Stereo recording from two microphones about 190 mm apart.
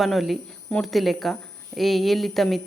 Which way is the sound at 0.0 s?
Centre (ahead or behind).